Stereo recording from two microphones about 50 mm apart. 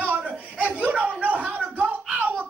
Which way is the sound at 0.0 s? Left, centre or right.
Right.